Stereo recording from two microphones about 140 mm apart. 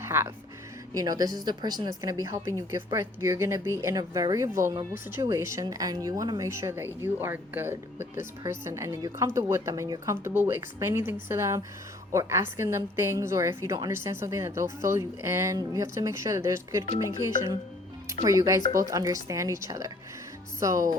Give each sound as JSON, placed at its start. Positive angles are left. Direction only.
{"t": 0.0, "sound": "music", "side_deg": -20}
{"t": 0.9, "sound": "a woman's voice", "side_deg": -25}